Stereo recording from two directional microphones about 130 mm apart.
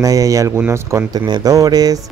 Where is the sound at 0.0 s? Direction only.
25° right (ahead or behind).